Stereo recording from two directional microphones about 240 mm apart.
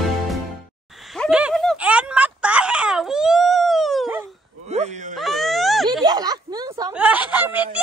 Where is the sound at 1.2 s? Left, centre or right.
Centre.